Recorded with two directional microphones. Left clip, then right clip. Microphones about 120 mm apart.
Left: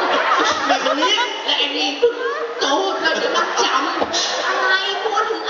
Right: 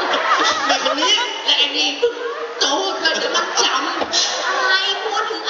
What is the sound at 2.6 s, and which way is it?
Music, 15° left (ahead or behind).